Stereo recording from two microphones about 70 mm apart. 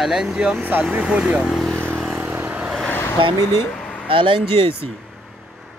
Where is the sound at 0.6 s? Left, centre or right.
Right.